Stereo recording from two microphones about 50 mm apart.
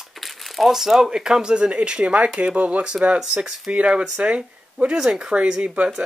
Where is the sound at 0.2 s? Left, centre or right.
Centre.